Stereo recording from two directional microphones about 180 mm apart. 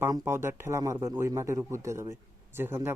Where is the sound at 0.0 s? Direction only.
15° right (ahead or behind).